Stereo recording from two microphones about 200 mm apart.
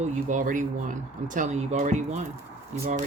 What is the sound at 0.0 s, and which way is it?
Speech, 40° right (ahead or behind).